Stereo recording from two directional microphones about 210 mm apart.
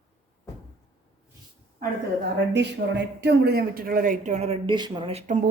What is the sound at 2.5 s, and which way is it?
Speech, 55° right (ahead or behind).